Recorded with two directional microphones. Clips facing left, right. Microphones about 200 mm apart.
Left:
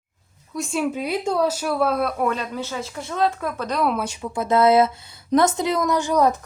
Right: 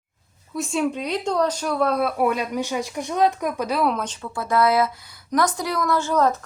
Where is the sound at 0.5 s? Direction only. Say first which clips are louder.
Right 1 dB; centre (ahead or behind).